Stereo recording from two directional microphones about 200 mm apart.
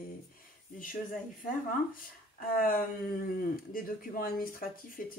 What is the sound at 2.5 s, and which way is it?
Speech, 45° left (ahead or behind).